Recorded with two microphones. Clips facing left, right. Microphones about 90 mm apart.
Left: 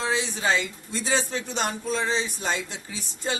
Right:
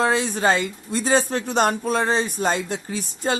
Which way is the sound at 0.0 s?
50° right (ahead or behind).